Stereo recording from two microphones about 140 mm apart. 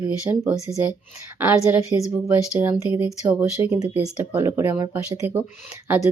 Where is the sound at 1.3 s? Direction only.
15° right (ahead or behind).